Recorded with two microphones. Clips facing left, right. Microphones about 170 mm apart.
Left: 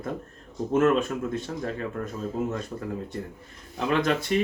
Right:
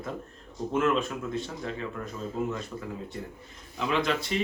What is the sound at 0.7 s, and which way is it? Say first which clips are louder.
Speech: left 5 dB; 45° left (ahead or behind).